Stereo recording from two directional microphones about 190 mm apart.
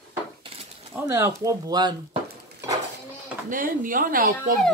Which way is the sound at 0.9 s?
15° right (ahead or behind).